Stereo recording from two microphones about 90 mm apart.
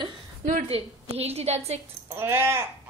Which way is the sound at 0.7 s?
90° right.